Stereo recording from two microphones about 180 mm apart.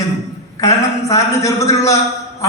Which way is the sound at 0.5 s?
20° left (ahead or behind).